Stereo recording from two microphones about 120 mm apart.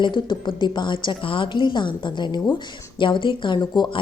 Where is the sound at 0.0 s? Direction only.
40° left (ahead or behind).